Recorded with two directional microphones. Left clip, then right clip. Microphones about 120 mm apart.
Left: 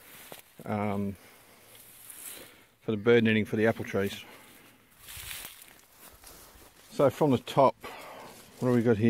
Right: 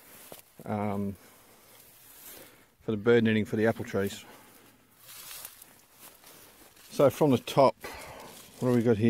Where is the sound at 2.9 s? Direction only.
15° right (ahead or behind).